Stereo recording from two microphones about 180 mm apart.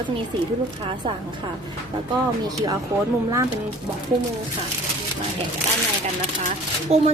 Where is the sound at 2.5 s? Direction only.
20° right (ahead or behind).